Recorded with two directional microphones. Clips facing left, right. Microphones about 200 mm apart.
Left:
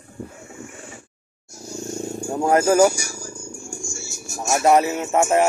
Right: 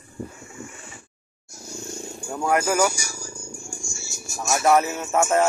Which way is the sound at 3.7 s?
60° left (ahead or behind).